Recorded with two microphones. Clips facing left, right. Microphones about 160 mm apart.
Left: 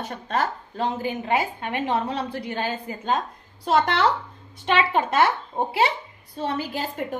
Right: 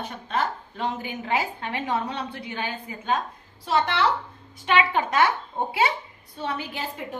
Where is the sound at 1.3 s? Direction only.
20° left (ahead or behind); by 2.7 s 35° left (ahead or behind).